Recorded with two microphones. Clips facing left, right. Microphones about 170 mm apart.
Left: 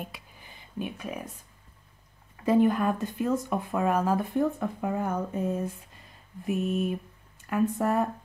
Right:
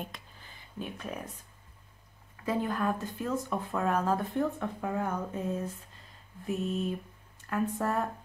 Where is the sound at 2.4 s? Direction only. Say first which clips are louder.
Left 8 dB; 15° left (ahead or behind).